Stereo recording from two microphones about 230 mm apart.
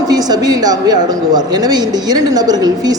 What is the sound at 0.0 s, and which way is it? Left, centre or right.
A woman's voice, centre.